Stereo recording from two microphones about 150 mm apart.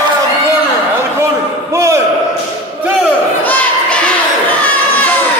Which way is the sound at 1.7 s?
20° right (ahead or behind).